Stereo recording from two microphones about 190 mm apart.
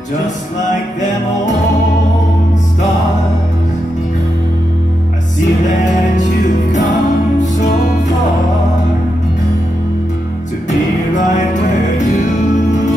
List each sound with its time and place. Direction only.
10.7 s music: 40° left (ahead or behind)